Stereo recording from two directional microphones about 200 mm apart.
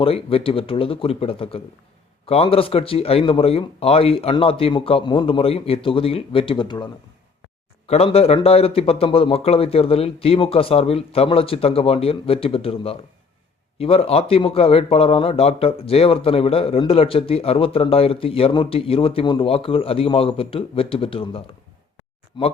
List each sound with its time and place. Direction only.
0.0 s a man's voice: 30° left (ahead or behind)